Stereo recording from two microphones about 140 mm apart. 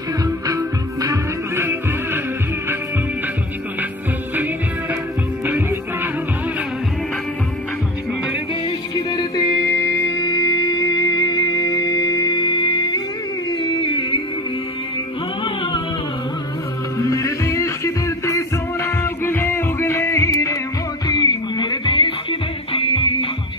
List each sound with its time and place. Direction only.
0.5 s music: 25° right (ahead or behind)
8.6 s music: 30° left (ahead or behind)
13.5 s a sound: 30° left (ahead or behind)
15.4 s music: 35° left (ahead or behind)
17.0 s music: 20° left (ahead or behind); by 23.2 s 40° left (ahead or behind)